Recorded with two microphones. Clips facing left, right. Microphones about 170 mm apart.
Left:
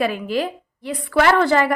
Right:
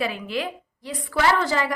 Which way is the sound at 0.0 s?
45° left (ahead or behind).